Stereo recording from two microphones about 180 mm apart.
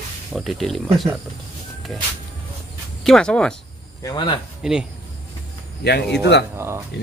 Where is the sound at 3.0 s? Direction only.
5° left (ahead or behind).